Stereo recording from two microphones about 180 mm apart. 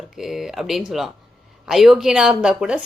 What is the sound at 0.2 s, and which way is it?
A woman's voice, centre (ahead or behind).